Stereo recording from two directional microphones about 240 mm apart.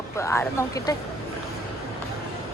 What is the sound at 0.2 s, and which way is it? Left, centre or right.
Speech, centre.